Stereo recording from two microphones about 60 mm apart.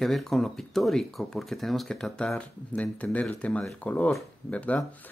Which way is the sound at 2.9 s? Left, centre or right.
Left.